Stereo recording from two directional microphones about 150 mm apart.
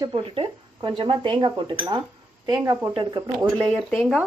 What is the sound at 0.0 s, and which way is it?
Speech, 40° right (ahead or behind).